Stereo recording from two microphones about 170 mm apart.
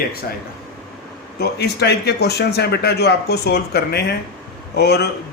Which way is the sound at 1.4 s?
75° left (ahead or behind).